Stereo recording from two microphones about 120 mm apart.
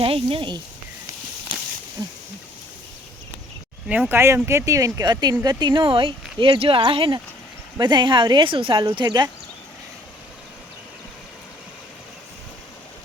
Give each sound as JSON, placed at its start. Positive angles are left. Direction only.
{"t": 0.0, "sound": "speech", "side_deg": -50}
{"t": 2.0, "sound": "a sound", "side_deg": -15}
{"t": 3.8, "sound": "speech", "side_deg": -10}
{"t": 4.4, "sound": "speech", "side_deg": -25}